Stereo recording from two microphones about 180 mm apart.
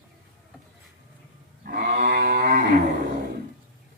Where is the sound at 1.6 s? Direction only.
50° right (ahead or behind).